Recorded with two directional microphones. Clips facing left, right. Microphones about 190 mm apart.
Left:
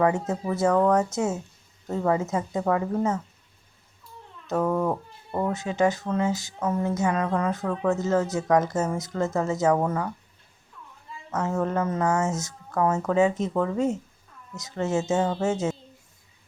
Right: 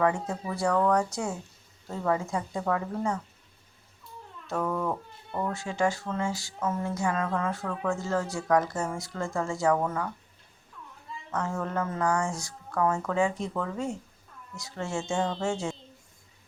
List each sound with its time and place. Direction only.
0.0 s speech: 20° left (ahead or behind)
4.4 s speech: 25° left (ahead or behind)
5.5 s speech: 20° left (ahead or behind)
11.3 s speech: 20° left (ahead or behind)